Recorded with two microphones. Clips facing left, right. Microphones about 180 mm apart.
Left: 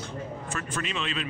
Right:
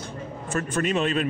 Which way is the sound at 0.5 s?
45° right (ahead or behind).